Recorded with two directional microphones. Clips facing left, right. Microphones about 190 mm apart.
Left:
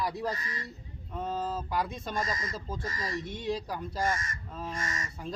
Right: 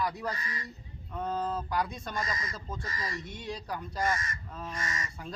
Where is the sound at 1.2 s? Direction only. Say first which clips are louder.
Right 1 dB; 25° left (ahead or behind).